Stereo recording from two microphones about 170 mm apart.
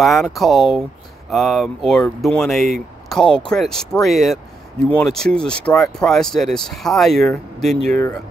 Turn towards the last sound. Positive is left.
turn(degrees=0)  # may be behind; listen again after turning